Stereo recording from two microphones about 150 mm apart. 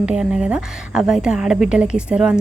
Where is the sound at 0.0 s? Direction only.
5° right (ahead or behind).